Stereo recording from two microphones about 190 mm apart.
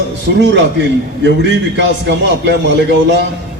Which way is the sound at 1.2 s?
65° right (ahead or behind).